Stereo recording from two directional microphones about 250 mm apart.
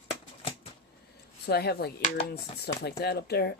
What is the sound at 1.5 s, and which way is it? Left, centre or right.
Speech, left.